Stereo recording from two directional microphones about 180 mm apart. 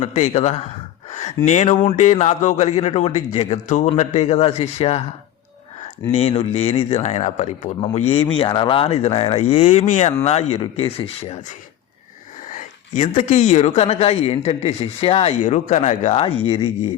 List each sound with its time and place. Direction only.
0.0 s speech: 40° left (ahead or behind)
6.1 s speech: 35° left (ahead or behind)
12.5 s speech: 45° left (ahead or behind)